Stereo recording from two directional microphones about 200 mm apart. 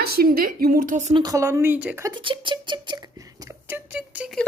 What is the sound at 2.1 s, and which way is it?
Speech, 20° right (ahead or behind).